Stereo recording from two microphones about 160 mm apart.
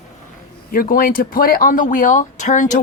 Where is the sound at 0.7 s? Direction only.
65° left (ahead or behind).